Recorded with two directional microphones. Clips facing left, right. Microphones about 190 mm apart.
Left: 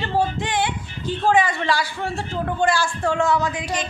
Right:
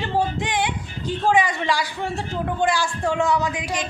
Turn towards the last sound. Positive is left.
turn(degrees=-15)  # may be behind; listen again after turning